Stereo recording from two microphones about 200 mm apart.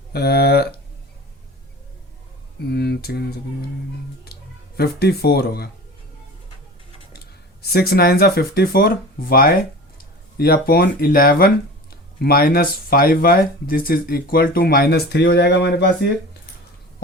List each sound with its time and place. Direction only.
0.1 s speech: 50° left (ahead or behind)
2.6 s speech: 55° left (ahead or behind)
4.8 s speech: 50° left (ahead or behind)
7.6 s speech: 50° left (ahead or behind)